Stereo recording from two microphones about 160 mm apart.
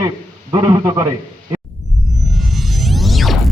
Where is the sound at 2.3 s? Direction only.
Centre (ahead or behind).